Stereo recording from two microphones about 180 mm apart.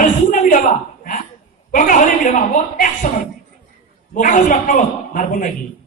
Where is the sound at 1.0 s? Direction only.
45° left (ahead or behind).